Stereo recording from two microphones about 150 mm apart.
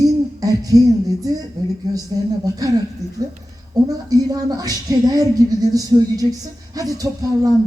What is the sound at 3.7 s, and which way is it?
A woman's voice, 25° right (ahead or behind).